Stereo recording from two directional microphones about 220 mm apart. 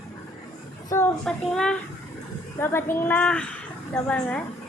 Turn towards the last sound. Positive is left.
turn(degrees=5)  # may be behind; listen again after turning